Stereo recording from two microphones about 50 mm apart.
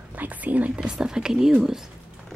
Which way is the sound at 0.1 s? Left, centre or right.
Right.